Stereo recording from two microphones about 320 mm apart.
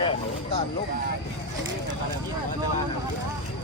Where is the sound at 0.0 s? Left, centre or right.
Centre.